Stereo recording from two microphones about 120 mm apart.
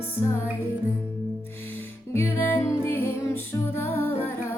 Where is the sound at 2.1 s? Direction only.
20° left (ahead or behind).